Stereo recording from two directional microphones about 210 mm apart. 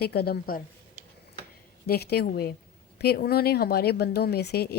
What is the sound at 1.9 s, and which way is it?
Speech, 50° left (ahead or behind).